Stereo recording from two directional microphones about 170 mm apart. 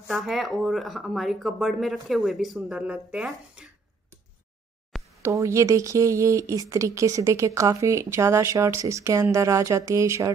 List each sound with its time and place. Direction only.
0.1 s speech: centre (ahead or behind)
5.2 s speech: 15° right (ahead or behind)